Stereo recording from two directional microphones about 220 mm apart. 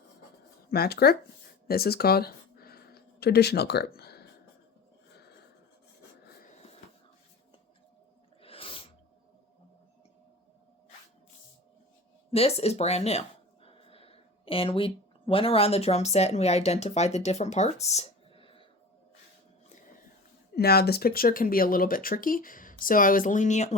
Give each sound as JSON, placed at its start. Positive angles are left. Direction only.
{"t": 0.7, "sound": "speech", "side_deg": 45}
{"t": 1.6, "sound": "a sound", "side_deg": 45}
{"t": 8.4, "sound": "sneeze", "side_deg": 25}
{"t": 12.3, "sound": "speech", "side_deg": 25}
{"t": 20.6, "sound": "speech", "side_deg": 45}